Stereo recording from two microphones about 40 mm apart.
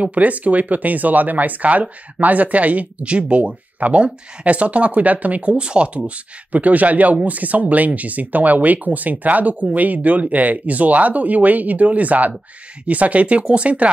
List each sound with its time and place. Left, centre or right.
0.0 s speech: right
5.6 s speech: right